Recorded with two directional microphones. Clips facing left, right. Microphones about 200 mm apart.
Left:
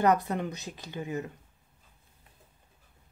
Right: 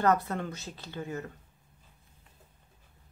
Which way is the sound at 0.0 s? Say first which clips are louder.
Left 2 dB; 15° left (ahead or behind).